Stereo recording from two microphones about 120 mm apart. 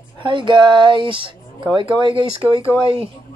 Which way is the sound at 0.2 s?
45° right (ahead or behind).